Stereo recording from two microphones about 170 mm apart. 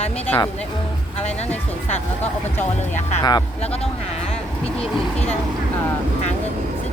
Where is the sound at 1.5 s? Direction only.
10° left (ahead or behind).